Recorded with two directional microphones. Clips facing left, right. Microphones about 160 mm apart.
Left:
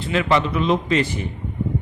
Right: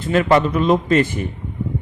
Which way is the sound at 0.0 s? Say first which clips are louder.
Right 4 dB; 45° right (ahead or behind).